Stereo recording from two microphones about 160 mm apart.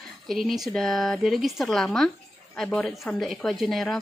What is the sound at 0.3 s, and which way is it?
A woman's voice, centre (ahead or behind).